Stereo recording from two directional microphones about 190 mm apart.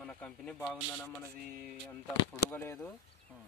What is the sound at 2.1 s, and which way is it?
Speech, 15° left (ahead or behind).